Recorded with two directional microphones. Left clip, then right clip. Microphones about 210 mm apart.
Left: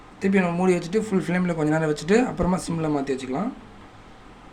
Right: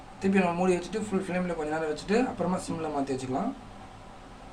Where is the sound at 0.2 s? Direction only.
30° left (ahead or behind).